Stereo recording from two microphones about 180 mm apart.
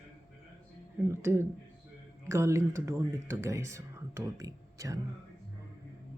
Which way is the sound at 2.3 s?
15° right (ahead or behind).